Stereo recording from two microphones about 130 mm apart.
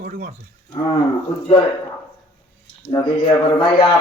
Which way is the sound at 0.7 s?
35° left (ahead or behind).